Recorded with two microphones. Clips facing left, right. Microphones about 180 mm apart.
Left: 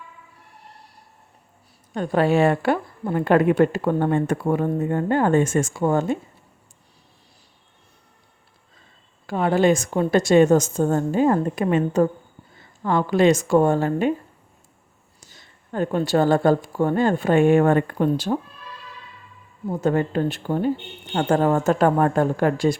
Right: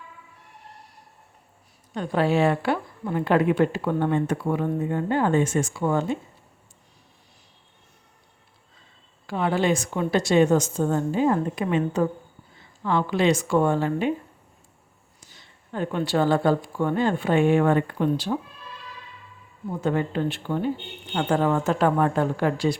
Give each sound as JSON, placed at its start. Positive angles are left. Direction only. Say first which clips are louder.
{"t": 1.9, "sound": "speech", "louder": "left 3 dB", "side_deg": 50}
{"t": 9.2, "sound": "speech", "louder": "left 5 dB", "side_deg": 45}
{"t": 15.2, "sound": "speech", "louder": "left 2 dB", "side_deg": 45}
{"t": 19.8, "sound": "speech", "louder": "left 3 dB", "side_deg": 45}